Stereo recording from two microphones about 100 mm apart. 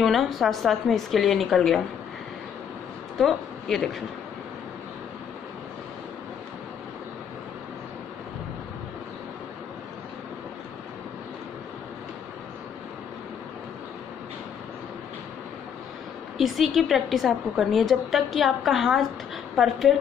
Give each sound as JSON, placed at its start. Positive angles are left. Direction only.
{"t": 0.0, "sound": "a woman's voice", "side_deg": 0}
{"t": 3.2, "sound": "speech", "side_deg": 0}
{"t": 16.3, "sound": "a woman's voice", "side_deg": 0}